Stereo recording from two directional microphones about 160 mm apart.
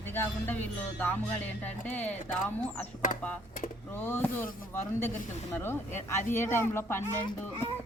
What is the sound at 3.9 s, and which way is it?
Speech, 15° left (ahead or behind).